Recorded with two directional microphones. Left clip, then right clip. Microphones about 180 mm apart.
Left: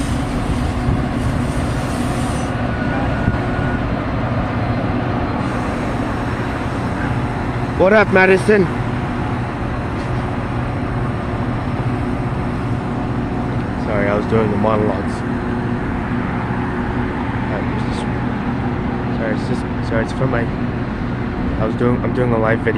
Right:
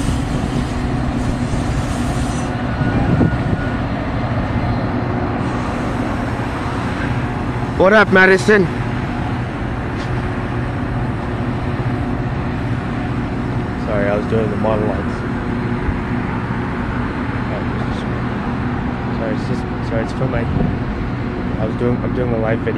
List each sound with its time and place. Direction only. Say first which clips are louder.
7.8 s speech: right 1 dB; 20° right (ahead or behind)